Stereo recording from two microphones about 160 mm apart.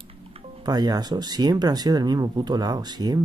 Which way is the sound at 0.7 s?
25° right (ahead or behind).